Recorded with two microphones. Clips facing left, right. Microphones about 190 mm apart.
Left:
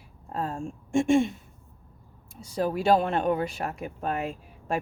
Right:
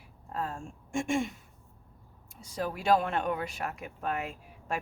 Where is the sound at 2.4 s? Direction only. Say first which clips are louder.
Left 5 dB; 30° left (ahead or behind).